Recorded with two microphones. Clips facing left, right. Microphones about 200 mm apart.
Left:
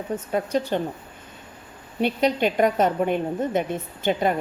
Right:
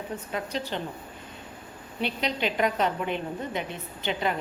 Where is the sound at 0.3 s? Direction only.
50° left (ahead or behind).